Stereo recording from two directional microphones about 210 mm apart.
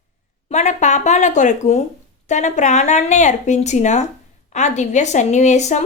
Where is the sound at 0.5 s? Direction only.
35° left (ahead or behind).